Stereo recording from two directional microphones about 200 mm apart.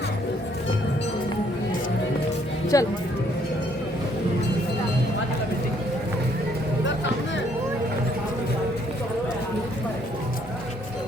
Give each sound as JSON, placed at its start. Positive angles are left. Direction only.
{"t": 2.7, "sound": "speech", "side_deg": 15}